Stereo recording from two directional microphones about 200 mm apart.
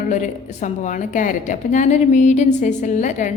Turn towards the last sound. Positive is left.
turn(degrees=35)  # may be behind; listen again after turning